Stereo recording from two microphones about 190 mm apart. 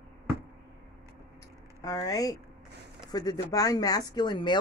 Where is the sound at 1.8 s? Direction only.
20° left (ahead or behind).